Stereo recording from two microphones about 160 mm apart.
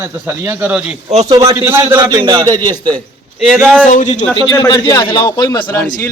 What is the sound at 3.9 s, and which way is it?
Speech, 50° left (ahead or behind).